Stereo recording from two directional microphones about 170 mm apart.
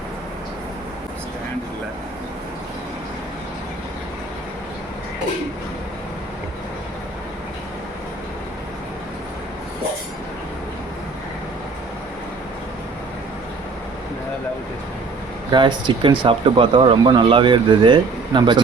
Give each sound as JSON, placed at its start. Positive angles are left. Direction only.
{"t": 15.5, "sound": "speech", "side_deg": -25}